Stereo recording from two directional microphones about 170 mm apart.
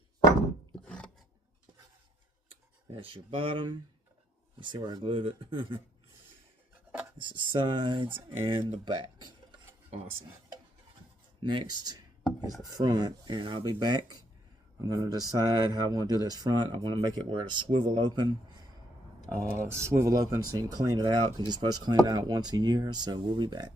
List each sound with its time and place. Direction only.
0.9 s filing: 5° left (ahead or behind)
2.5 s speech: 30° right (ahead or behind)
7.2 s speech: 30° right (ahead or behind)
11.4 s speech: 25° right (ahead or behind)
19.5 s speech: 15° right (ahead or behind)